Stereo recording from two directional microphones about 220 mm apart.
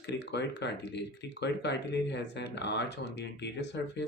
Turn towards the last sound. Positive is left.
turn(degrees=50)  # may be behind; listen again after turning